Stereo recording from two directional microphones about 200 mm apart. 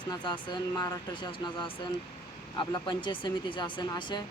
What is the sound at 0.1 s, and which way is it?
Speech, 20° left (ahead or behind).